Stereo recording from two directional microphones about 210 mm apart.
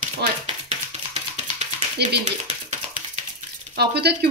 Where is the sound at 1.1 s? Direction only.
35° right (ahead or behind).